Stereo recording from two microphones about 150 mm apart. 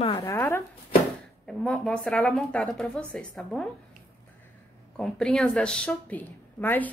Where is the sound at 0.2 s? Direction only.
20° left (ahead or behind).